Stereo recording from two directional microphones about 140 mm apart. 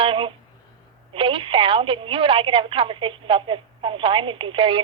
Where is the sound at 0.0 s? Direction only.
40° right (ahead or behind).